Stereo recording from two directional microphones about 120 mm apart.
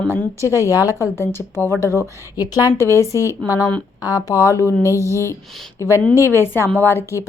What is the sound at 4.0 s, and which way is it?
A woman's voice, 30° left (ahead or behind).